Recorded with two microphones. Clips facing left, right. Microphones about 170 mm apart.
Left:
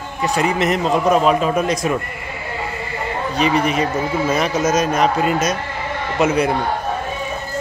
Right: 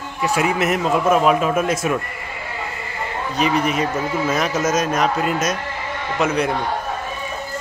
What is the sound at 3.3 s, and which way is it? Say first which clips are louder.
A man's voice: left 2 dB; centre (ahead or behind).